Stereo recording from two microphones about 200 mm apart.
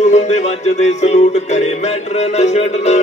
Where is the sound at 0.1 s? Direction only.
35° left (ahead or behind).